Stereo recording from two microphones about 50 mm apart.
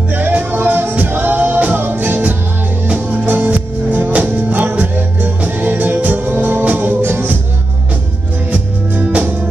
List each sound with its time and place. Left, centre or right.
0.1 s music: right
8.5 s music: right